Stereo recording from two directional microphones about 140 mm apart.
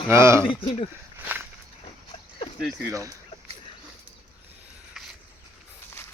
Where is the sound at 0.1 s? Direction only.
20° right (ahead or behind).